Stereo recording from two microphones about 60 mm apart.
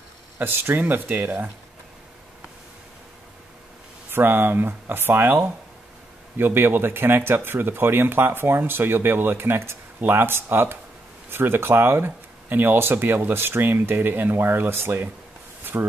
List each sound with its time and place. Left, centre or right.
0.4 s speech: right
4.1 s speech: right
15.6 s a sound: right